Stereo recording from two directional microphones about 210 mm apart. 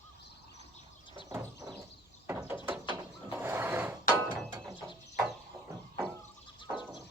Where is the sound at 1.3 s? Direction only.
15° right (ahead or behind).